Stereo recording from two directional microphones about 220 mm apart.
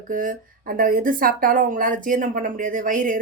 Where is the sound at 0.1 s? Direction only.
35° right (ahead or behind).